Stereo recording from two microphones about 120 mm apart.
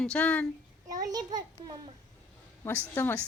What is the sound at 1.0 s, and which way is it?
Speech, 30° right (ahead or behind).